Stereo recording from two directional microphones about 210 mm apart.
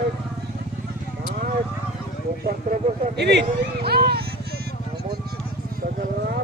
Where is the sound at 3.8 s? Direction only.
50° right (ahead or behind).